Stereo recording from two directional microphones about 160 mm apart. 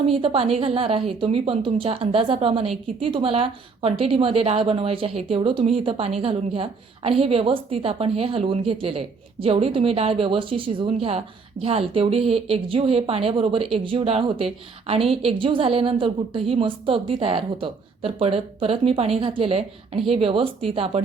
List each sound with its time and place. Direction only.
0.0 s a woman's voice: 35° right (ahead or behind)